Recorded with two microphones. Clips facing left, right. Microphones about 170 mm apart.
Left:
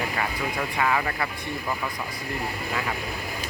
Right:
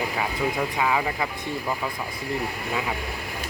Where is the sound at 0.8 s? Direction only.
10° right (ahead or behind).